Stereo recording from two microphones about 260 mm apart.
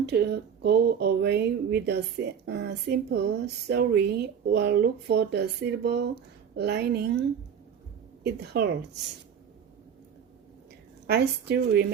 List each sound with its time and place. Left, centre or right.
0.0 s speech: right
11.0 s speech: right